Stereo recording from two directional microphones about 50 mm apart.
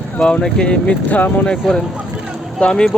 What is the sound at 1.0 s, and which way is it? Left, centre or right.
Speech, left.